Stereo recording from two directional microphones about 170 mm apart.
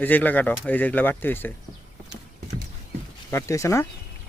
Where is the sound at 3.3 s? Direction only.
15° left (ahead or behind).